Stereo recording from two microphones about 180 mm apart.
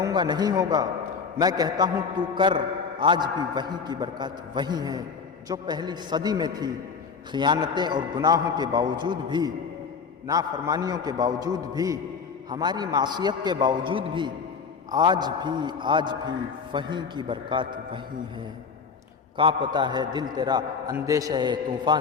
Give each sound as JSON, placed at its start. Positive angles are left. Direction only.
{"t": 0.0, "sound": "a man's voice", "side_deg": -25}
{"t": 19.4, "sound": "a man's voice", "side_deg": -30}